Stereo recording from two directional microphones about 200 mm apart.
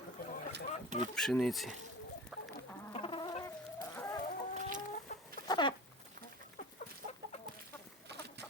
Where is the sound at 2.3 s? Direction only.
Centre (ahead or behind).